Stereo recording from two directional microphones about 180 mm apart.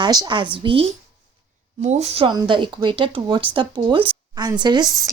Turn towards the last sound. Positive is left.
turn(degrees=-20)  # may be behind; listen again after turning